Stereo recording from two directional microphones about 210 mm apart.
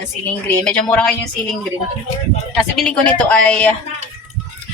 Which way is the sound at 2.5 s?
Centre (ahead or behind).